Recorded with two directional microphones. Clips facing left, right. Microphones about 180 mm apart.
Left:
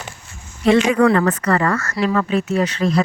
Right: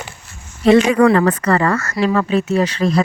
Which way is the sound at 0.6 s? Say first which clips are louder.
Right 3 dB; 35° right (ahead or behind).